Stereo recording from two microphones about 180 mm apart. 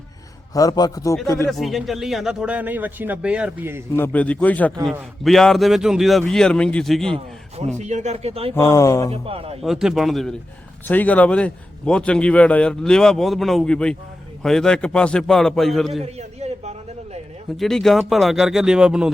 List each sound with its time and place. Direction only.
0.5 s a man's voice: 20° left (ahead or behind)
1.5 s a man's voice: centre (ahead or behind)
3.9 s a man's voice: 10° left (ahead or behind)
7.8 s speech: 40° right (ahead or behind)
8.5 s speech: 15° left (ahead or behind)
9.2 s speech: 30° right (ahead or behind)
9.6 s a man's voice: centre (ahead or behind)
15.9 s a sound: 35° right (ahead or behind)
17.6 s a man's voice: centre (ahead or behind)